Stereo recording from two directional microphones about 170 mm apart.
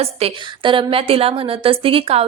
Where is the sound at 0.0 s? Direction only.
35° right (ahead or behind).